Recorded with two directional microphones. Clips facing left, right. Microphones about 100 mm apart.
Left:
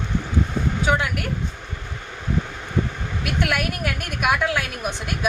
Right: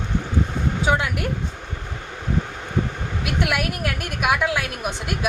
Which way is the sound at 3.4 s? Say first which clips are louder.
Even; 5° right (ahead or behind).